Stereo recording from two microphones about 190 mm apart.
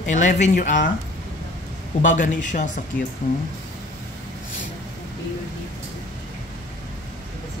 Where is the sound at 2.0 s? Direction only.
40° left (ahead or behind).